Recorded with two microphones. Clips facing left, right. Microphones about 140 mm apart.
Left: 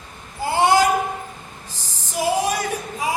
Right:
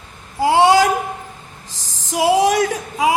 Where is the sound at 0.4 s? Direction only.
90° right.